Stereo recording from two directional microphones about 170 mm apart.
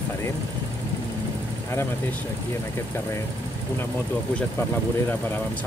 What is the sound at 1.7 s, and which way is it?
Speech, 10° left (ahead or behind).